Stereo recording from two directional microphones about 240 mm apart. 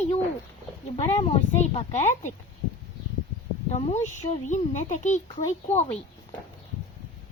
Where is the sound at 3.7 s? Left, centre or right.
Left.